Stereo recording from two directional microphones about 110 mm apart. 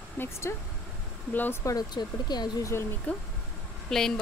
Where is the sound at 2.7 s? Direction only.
20° left (ahead or behind).